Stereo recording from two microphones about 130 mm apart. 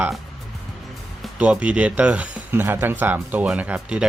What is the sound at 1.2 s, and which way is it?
Speech, 10° right (ahead or behind).